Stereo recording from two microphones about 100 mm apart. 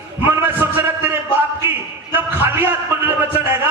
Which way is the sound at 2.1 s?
20° right (ahead or behind).